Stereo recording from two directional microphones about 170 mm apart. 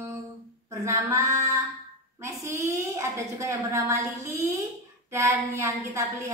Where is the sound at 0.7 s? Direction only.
15° right (ahead or behind).